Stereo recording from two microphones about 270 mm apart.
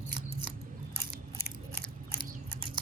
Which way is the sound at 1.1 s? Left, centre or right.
Right.